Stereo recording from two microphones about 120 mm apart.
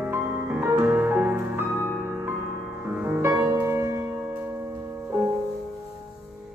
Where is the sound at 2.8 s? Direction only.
15° right (ahead or behind).